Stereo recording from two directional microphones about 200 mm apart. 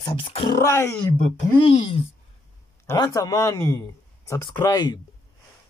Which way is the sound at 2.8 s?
15° left (ahead or behind).